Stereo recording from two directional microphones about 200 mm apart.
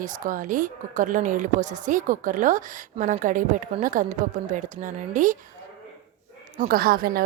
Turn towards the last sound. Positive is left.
turn(degrees=-45)  # may be behind; listen again after turning